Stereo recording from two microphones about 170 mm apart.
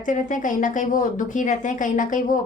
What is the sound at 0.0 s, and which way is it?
A woman's voice, 50° left (ahead or behind).